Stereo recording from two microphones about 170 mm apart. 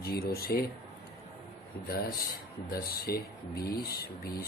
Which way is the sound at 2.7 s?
65° left (ahead or behind).